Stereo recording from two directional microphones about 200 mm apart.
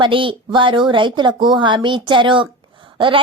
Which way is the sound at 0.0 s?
25° right (ahead or behind).